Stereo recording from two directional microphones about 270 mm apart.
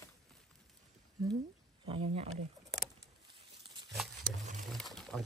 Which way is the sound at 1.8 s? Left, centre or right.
Right.